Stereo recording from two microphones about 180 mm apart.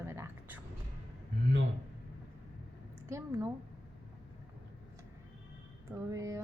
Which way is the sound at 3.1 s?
15° right (ahead or behind).